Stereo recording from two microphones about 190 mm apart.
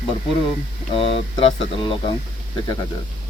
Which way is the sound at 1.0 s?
30° left (ahead or behind).